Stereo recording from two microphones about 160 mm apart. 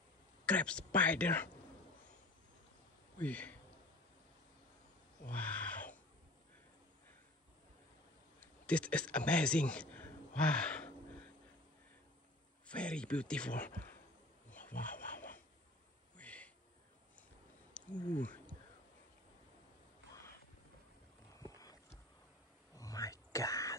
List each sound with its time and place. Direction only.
0.5 s speech: 5° left (ahead or behind)
3.2 s speech: 10° left (ahead or behind)
5.3 s a sound: 10° left (ahead or behind)
8.6 s speech: 10° left (ahead or behind)
12.6 s speech: 5° left (ahead or behind)
14.5 s rub: 10° left (ahead or behind)
16.2 s a sound: 10° left (ahead or behind)
17.8 s wild animals: 10° left (ahead or behind)
18.1 s speech: 10° left (ahead or behind)
21.4 s a sound: 20° left (ahead or behind)
22.8 s whispering: 20° left (ahead or behind)